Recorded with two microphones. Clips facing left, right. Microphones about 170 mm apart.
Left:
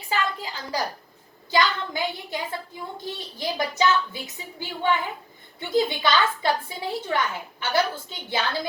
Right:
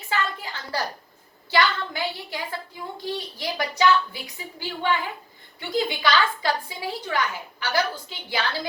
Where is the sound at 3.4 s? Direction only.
25° left (ahead or behind).